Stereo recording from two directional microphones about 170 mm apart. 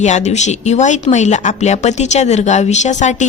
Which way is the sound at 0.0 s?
40° left (ahead or behind).